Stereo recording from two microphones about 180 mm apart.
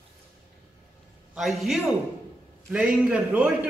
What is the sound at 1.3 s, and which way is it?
A woman's voice, centre (ahead or behind).